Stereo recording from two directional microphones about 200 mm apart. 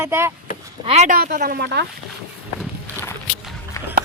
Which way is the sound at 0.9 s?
35° right (ahead or behind).